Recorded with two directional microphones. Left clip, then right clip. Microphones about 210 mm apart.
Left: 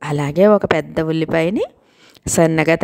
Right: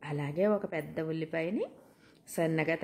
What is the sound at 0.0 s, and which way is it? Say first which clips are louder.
Speech: left 17 dB; 50° left (ahead or behind).